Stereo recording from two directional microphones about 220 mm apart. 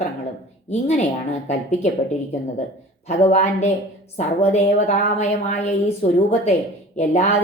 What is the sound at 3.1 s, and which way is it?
A woman's voice, 30° left (ahead or behind).